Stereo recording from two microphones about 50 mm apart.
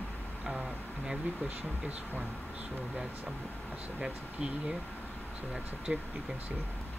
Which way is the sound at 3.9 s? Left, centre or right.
Centre.